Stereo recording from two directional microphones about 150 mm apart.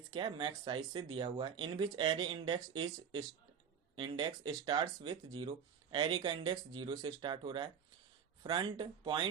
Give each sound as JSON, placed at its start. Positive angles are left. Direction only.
{"t": 0.1, "sound": "speech", "side_deg": -35}